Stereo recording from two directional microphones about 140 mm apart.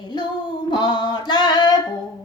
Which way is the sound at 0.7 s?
35° left (ahead or behind).